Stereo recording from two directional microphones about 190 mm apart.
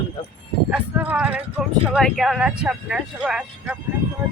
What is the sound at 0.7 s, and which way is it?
Speech, 10° right (ahead or behind).